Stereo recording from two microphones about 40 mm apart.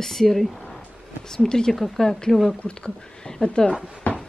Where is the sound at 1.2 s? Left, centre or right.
Centre.